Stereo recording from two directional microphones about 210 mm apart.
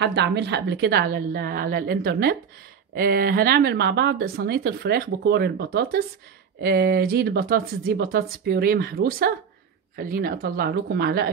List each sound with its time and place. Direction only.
0.0 s speech: 55° right (ahead or behind)